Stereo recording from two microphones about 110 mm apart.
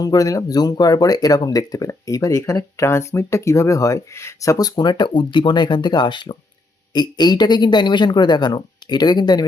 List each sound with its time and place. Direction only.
0.0 s speech: 35° left (ahead or behind)